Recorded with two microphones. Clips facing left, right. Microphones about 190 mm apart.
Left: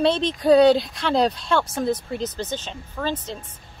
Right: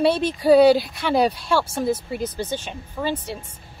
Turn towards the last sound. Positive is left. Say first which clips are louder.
# right 1 dB
turn(degrees=-10)  # may be behind; listen again after turning